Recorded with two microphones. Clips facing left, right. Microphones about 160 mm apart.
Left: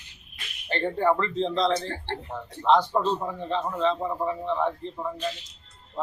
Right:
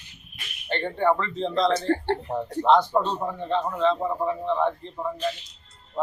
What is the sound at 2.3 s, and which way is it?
Speech, 35° right (ahead or behind).